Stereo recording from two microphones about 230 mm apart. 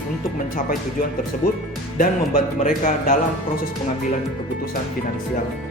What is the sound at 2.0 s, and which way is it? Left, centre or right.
Speech, left.